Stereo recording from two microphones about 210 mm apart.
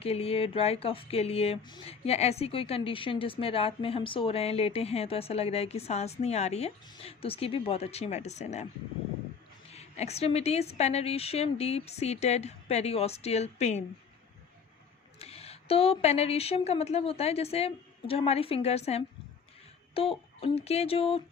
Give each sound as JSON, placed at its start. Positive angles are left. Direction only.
{"t": 0.0, "sound": "speech", "side_deg": 30}
{"t": 9.7, "sound": "a woman's voice", "side_deg": 30}
{"t": 15.2, "sound": "speech", "side_deg": 30}